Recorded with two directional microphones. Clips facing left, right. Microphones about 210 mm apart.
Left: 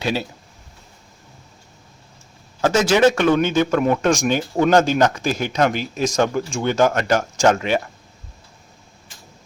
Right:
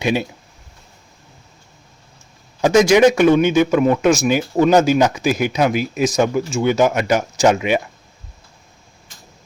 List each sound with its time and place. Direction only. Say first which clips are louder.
0.0 s speech: right 4 dB; 15° right (ahead or behind)
2.6 s speech: right 4 dB; 15° right (ahead or behind)